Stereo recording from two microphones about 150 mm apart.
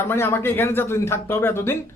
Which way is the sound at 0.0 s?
15° left (ahead or behind).